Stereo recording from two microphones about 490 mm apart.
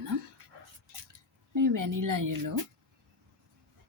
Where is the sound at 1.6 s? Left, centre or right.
Right.